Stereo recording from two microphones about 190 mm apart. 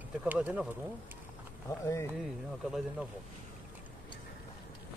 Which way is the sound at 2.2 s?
Centre (ahead or behind).